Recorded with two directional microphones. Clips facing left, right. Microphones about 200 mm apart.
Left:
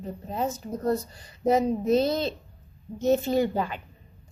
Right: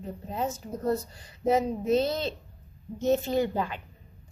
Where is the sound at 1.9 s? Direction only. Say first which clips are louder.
Left 2 dB; 40° left (ahead or behind).